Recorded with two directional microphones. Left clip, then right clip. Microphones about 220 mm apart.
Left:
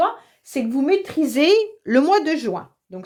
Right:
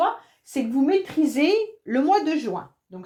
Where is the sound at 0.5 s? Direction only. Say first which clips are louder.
Left 2 dB; 45° left (ahead or behind).